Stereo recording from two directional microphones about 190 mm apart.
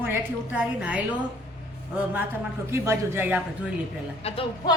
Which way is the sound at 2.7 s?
15° right (ahead or behind).